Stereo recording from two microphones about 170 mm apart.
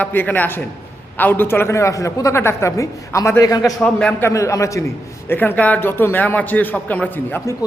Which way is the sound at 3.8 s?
5° left (ahead or behind).